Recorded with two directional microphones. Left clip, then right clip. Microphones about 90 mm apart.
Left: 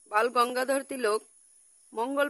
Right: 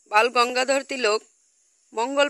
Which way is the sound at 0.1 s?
20° right (ahead or behind).